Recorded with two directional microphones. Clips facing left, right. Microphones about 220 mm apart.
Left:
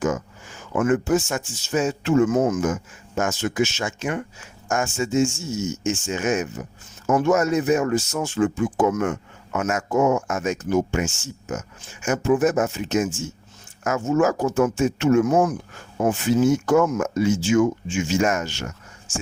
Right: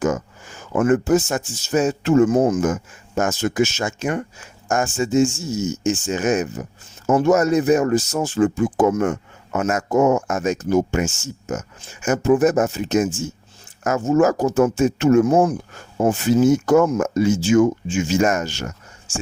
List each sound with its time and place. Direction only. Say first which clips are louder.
0.7 s speech: right 3 dB; 45° right (ahead or behind)